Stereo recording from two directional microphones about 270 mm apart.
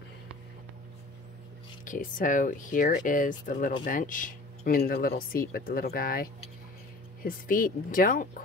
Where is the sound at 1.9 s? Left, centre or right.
Left.